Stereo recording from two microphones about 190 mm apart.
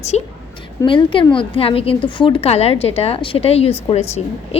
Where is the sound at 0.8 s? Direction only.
25° left (ahead or behind).